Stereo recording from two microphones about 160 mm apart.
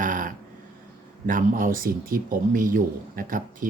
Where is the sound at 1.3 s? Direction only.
60° right (ahead or behind).